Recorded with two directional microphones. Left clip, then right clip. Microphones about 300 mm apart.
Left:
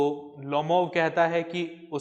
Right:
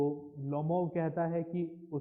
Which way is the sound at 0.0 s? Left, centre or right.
Left.